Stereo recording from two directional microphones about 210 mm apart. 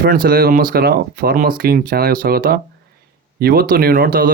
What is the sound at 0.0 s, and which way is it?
Speech, 45° right (ahead or behind).